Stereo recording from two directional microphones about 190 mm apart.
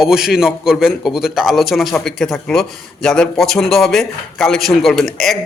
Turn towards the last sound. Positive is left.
turn(degrees=0)  # may be behind; listen again after turning